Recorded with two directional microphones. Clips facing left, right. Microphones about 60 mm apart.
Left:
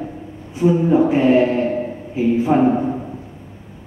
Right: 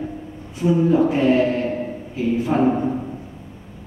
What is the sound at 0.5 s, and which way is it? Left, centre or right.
Speech, left.